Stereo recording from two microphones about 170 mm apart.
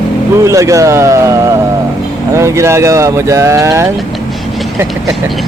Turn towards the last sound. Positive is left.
turn(degrees=-15)  # may be behind; listen again after turning